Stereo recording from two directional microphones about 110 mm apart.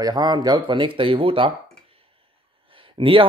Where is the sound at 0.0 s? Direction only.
40° right (ahead or behind).